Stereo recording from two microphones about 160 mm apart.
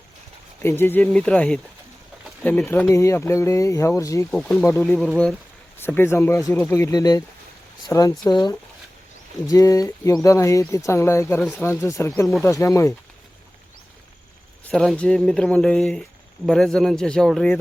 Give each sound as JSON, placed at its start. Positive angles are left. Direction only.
{"t": 0.6, "sound": "speech", "side_deg": 15}
{"t": 4.3, "sound": "speech", "side_deg": 5}
{"t": 5.8, "sound": "speech", "side_deg": 15}
{"t": 14.7, "sound": "speech", "side_deg": 5}